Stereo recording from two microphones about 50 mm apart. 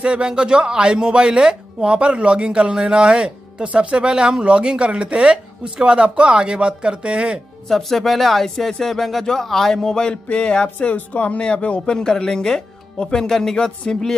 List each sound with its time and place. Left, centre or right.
0.0 s speech: centre
7.7 s speech: centre
10.2 s music: centre
10.8 s speech: left; by 14.1 s centre